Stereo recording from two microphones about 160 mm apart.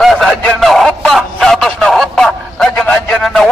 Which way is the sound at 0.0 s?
Centre (ahead or behind).